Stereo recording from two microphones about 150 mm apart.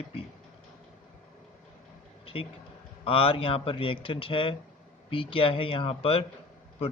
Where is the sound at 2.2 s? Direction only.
35° left (ahead or behind).